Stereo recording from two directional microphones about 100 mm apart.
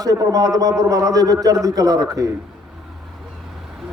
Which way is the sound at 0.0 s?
35° right (ahead or behind).